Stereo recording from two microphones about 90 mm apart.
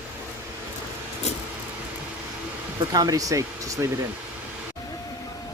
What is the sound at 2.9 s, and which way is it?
Speech, 40° right (ahead or behind).